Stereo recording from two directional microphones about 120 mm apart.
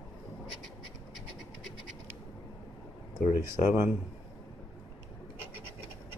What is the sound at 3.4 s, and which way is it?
Speech, 25° right (ahead or behind).